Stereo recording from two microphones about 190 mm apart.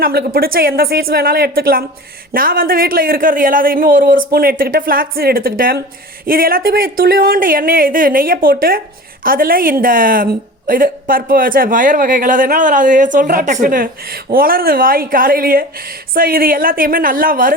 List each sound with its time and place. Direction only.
0.0 s a woman's voice: 55° right (ahead or behind)